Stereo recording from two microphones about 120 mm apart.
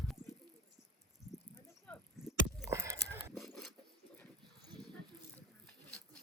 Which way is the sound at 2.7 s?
25° right (ahead or behind).